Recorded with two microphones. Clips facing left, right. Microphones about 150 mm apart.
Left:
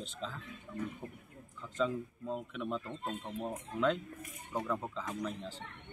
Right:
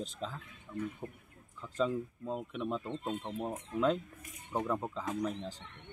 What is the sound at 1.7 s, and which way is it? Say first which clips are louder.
Speech: right 1 dB; 30° right (ahead or behind).